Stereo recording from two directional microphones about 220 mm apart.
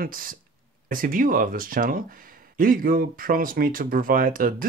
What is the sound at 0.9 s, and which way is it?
Speech, 40° right (ahead or behind).